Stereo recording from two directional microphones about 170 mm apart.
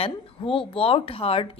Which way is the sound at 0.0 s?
30° left (ahead or behind).